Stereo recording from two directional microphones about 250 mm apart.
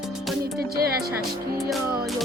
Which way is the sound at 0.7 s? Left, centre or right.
Right.